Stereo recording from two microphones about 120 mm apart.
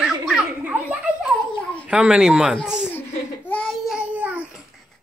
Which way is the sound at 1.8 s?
5° right (ahead or behind).